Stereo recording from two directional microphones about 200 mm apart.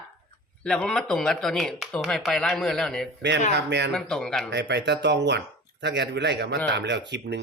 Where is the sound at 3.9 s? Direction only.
5° left (ahead or behind).